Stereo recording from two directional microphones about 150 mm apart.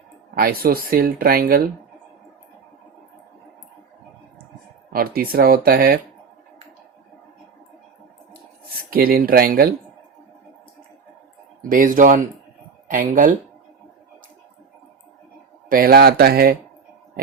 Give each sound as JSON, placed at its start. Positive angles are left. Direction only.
{"t": 0.3, "sound": "speech", "side_deg": -85}
{"t": 4.9, "sound": "speech", "side_deg": -80}
{"t": 8.9, "sound": "speech", "side_deg": -80}
{"t": 11.7, "sound": "speech", "side_deg": -65}
{"t": 15.7, "sound": "speech", "side_deg": -90}